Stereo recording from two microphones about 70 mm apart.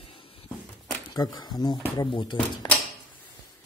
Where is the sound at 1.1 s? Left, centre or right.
Left.